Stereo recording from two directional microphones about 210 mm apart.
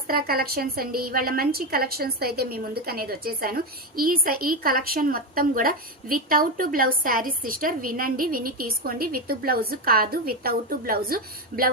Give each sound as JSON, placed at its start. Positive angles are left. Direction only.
{"t": 0.1, "sound": "a woman's voice", "side_deg": -45}